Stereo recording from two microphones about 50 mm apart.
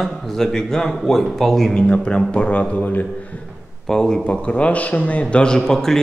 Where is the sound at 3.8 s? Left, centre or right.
Centre.